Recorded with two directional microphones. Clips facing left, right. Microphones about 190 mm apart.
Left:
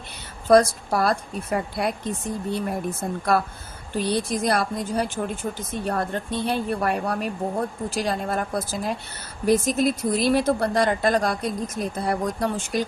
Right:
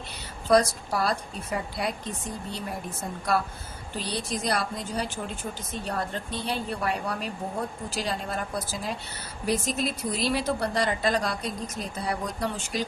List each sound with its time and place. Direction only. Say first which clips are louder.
0.4 s speech: left 5 dB; 50° left (ahead or behind)